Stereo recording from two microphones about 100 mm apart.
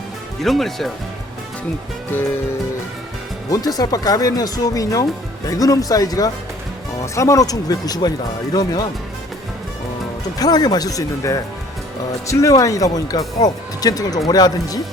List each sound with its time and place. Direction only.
0.4 s speech: centre (ahead or behind)
3.5 s speech: 40° left (ahead or behind)
10.3 s speech: 40° left (ahead or behind)